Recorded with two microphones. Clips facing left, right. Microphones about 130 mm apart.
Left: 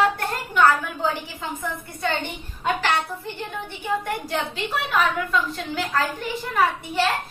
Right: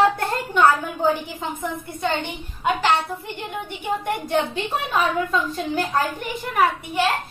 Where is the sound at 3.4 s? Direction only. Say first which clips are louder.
Right 1 dB; 20° right (ahead or behind).